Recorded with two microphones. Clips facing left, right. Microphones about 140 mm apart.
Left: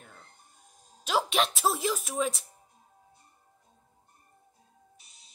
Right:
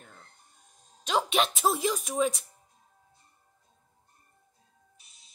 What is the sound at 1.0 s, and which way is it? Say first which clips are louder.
Speech: right 1 dB; 5° left (ahead or behind).